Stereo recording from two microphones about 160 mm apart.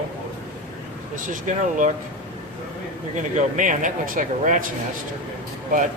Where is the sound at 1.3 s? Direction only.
55° right (ahead or behind).